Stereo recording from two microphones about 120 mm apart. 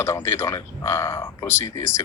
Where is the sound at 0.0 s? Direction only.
20° left (ahead or behind).